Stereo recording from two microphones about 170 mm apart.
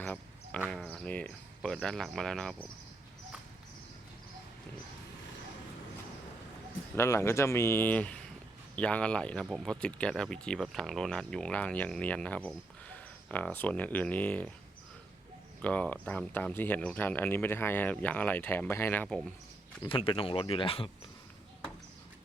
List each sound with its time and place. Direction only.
0.0 s a sound: 10° left (ahead or behind)
0.7 s speech: 5° left (ahead or behind)
6.9 s speech: 15° left (ahead or behind)
15.6 s speech: 10° left (ahead or behind)
19.8 s speech: 30° left (ahead or behind)